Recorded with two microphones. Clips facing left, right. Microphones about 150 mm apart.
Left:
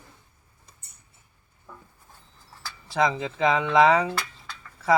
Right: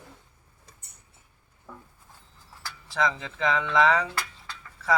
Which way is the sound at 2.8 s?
15° left (ahead or behind).